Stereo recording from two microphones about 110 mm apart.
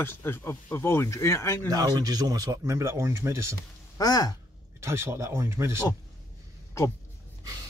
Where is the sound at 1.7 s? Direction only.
35° right (ahead or behind).